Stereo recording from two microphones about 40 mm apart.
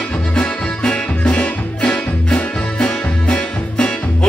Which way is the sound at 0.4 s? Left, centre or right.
Left.